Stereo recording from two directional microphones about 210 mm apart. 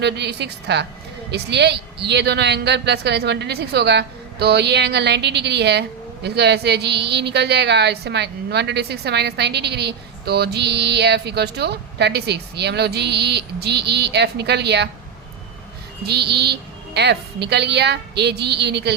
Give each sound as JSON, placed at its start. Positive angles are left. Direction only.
{"t": 0.0, "sound": "a woman's voice", "side_deg": -55}
{"t": 16.0, "sound": "a woman's voice", "side_deg": -50}